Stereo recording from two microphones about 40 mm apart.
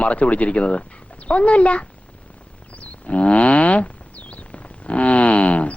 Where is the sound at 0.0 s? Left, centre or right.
Left.